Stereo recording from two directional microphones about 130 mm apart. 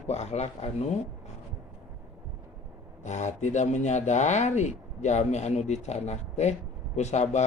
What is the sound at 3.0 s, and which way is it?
Speech, 65° left (ahead or behind).